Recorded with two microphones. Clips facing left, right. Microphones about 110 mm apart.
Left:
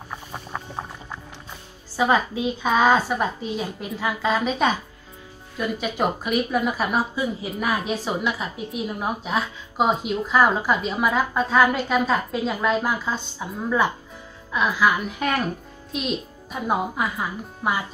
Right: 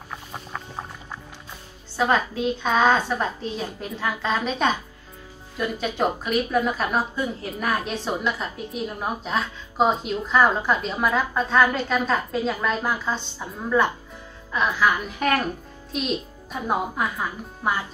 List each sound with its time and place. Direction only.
2.0 s a woman's voice: 10° left (ahead or behind)